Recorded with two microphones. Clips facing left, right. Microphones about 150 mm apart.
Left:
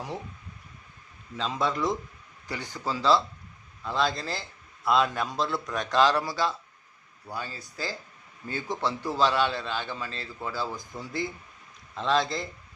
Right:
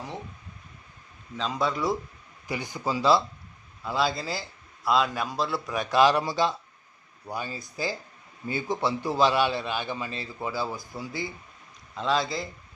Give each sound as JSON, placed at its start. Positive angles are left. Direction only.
{"t": 1.4, "sound": "a man's voice", "side_deg": 0}